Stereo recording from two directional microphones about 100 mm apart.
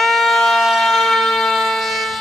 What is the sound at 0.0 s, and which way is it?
Siren, centre (ahead or behind).